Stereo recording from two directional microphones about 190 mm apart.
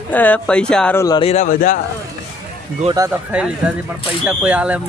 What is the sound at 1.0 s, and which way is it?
Speech, 20° left (ahead or behind).